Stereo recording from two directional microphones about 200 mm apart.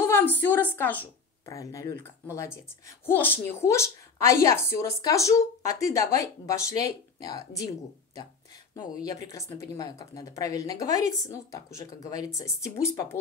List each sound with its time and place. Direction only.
0.0 s a woman's voice: 10° left (ahead or behind)
9.3 s a woman's voice: 15° left (ahead or behind)